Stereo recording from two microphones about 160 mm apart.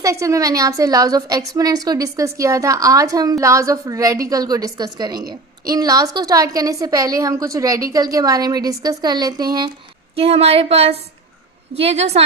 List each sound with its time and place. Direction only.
0.0 s a woman's voice: 20° right (ahead or behind)
10.2 s speech: 40° right (ahead or behind)